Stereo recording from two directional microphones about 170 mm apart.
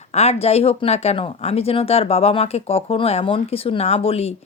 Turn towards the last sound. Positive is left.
turn(degrees=35)  # may be behind; listen again after turning